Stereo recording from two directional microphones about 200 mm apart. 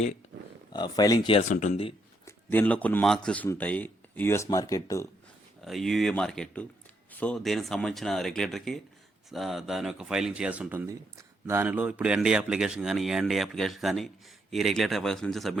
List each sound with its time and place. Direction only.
0.7 s speech: 20° left (ahead or behind)
1.4 s speech: 40° left (ahead or behind)
2.2 s speech: 10° left (ahead or behind)
5.6 s speech: centre (ahead or behind)